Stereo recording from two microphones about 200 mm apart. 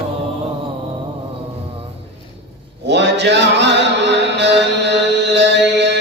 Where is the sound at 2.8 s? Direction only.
60° right (ahead or behind).